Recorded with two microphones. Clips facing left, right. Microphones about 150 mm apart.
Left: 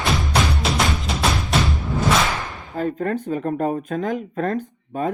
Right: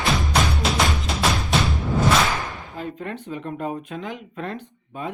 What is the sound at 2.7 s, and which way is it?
Speech, 45° left (ahead or behind).